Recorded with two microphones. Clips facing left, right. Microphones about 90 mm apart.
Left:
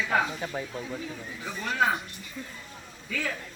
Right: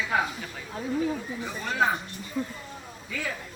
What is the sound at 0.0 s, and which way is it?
Snake, 5° right (ahead or behind).